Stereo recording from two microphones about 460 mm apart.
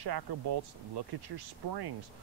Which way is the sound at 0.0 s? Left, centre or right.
Right.